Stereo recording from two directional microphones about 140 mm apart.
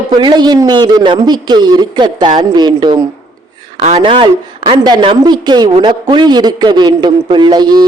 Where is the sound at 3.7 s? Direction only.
50° right (ahead or behind).